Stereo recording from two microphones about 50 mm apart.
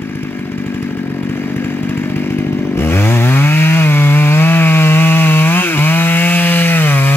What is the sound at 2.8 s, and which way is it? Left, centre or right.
Chainsaw, left.